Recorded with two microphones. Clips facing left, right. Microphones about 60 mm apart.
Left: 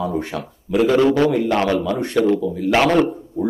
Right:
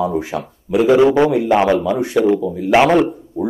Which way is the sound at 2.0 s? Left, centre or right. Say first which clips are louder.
Right 2 dB; centre.